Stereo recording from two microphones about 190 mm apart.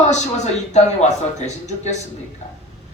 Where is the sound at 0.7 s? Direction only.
35° left (ahead or behind).